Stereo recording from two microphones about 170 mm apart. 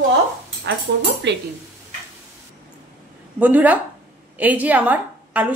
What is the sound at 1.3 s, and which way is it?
Speech, 90° right.